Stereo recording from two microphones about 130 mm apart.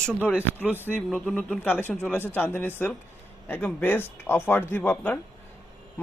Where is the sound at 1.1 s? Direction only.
5° left (ahead or behind).